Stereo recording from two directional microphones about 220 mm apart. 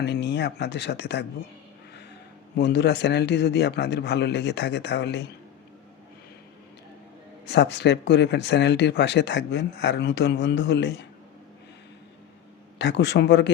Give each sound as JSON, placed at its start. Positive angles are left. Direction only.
{"t": 0.0, "sound": "speech", "side_deg": 50}
{"t": 2.6, "sound": "speech", "side_deg": 50}
{"t": 7.4, "sound": "speech", "side_deg": 50}
{"t": 12.8, "sound": "speech", "side_deg": 50}